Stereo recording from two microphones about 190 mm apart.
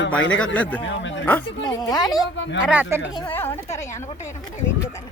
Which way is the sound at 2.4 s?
75° left (ahead or behind).